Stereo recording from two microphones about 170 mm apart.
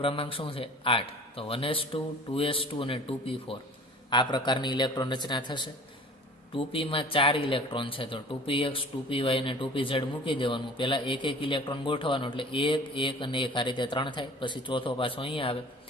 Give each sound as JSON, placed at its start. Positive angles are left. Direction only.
{"t": 0.0, "sound": "a man's voice", "side_deg": 30}